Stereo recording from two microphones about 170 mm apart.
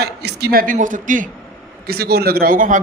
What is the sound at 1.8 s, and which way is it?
Speech, 65° right (ahead or behind).